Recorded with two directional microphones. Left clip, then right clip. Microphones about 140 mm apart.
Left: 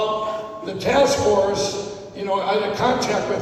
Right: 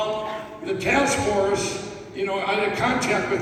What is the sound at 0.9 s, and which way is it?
Speech, 35° left (ahead or behind).